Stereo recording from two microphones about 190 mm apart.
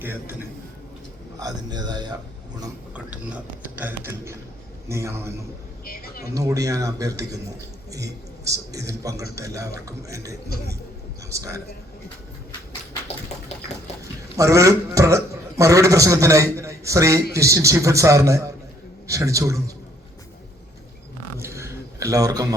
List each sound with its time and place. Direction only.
0.0 s a man's voice: 10° right (ahead or behind)
1.4 s a man's voice: 20° right (ahead or behind)
2.9 s a man's voice: 5° right (ahead or behind)
5.8 s speech: 50° left (ahead or behind)
6.3 s a man's voice: 20° right (ahead or behind)
14.3 s a man's voice: 15° right (ahead or behind)
21.3 s a sound: 15° right (ahead or behind)